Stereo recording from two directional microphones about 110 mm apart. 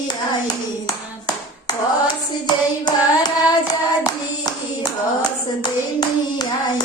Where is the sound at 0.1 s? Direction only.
35° left (ahead or behind).